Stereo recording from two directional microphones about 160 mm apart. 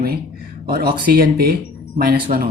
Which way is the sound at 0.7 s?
70° right (ahead or behind).